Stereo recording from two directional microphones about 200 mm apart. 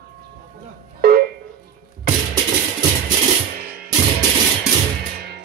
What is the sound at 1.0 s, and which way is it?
Music, 50° right (ahead or behind).